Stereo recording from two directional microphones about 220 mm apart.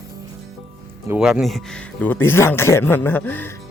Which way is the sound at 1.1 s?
5° right (ahead or behind).